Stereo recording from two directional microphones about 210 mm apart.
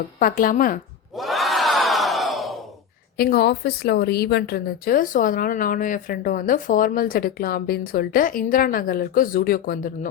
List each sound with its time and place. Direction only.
0.2 s a woman's voice: 40° left (ahead or behind)
1.1 s crowd: centre (ahead or behind)
3.2 s speech: 45° left (ahead or behind)